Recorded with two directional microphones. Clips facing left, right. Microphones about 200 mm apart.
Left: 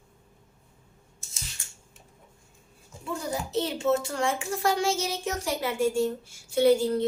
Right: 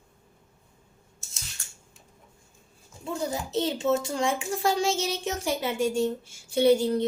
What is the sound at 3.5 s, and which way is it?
A child's voice, 20° right (ahead or behind).